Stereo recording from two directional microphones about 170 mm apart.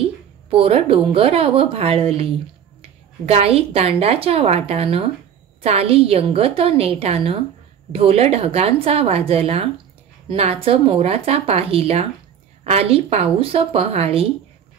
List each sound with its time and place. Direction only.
0.0 s a woman's voice: 35° right (ahead or behind)
3.3 s speech: 35° right (ahead or behind)